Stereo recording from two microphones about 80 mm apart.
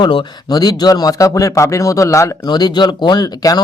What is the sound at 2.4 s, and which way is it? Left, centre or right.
Speech, left.